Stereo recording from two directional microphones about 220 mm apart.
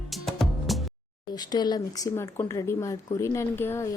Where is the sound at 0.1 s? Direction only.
Centre (ahead or behind).